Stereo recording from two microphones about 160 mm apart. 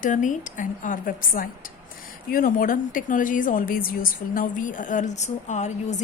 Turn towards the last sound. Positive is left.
turn(degrees=45)  # may be behind; listen again after turning